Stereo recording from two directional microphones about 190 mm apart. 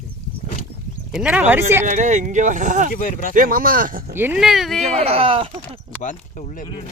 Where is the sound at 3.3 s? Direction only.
45° right (ahead or behind).